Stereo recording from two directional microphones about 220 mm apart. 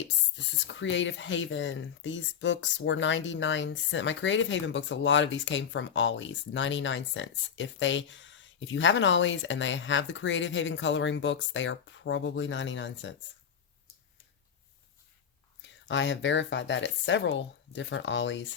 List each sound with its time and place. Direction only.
0.7 s speech: 55° left (ahead or behind)
15.6 s speech: 55° left (ahead or behind)